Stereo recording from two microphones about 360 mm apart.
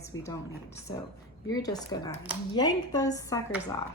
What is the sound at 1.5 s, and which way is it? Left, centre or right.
A woman's voice, centre.